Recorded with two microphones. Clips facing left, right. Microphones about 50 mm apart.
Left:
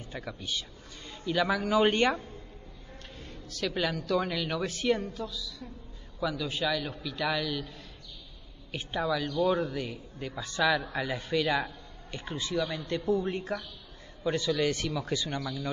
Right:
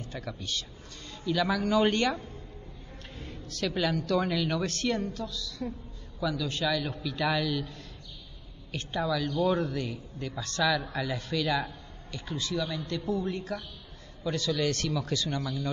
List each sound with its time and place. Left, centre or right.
0.0 s a man's voice: centre
1.2 s a man's voice: left
2.1 s a man's voice: left
3.2 s a man's voice: centre
8.7 s a man's voice: centre
10.6 s a man's voice: left
14.2 s a man's voice: centre
15.3 s a man's voice: left